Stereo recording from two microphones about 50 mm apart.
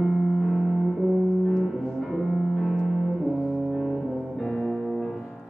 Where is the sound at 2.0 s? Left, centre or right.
Centre.